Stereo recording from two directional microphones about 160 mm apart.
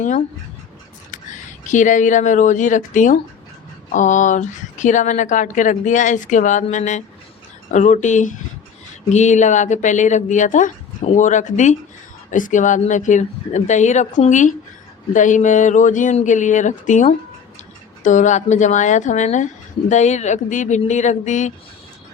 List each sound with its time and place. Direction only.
1.6 s speech: 50° left (ahead or behind)